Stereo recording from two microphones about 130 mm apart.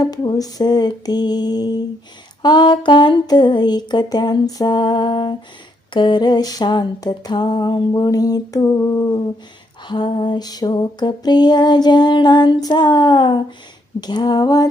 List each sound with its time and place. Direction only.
0.0 s lullaby: 30° left (ahead or behind)
9.8 s lullaby: 35° left (ahead or behind)